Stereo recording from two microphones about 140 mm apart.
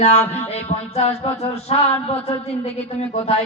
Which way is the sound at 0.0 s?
55° left (ahead or behind).